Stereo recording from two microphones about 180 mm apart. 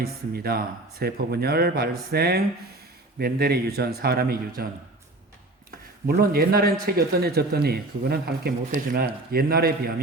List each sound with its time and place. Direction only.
0.0 s speech: 60° right (ahead or behind)
6.1 s speech: 55° right (ahead or behind)